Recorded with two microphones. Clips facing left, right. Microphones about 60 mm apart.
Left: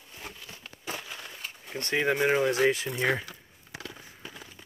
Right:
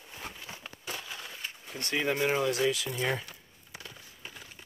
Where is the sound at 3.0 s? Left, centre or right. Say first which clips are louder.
Left 4 dB; left.